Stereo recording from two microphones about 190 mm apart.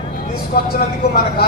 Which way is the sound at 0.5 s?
50° left (ahead or behind).